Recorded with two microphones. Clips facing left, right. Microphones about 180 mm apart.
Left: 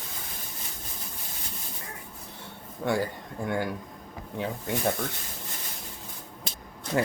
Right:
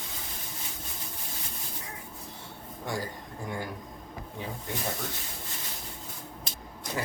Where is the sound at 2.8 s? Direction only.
65° left (ahead or behind).